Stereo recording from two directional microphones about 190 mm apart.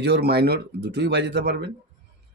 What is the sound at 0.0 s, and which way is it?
Speech, 60° right (ahead or behind).